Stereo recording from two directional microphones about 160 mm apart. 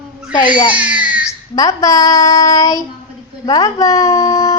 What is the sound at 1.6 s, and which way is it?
A child's voice, 20° left (ahead or behind).